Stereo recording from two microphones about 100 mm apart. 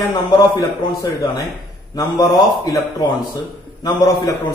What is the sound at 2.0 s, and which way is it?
Speech, 40° left (ahead or behind).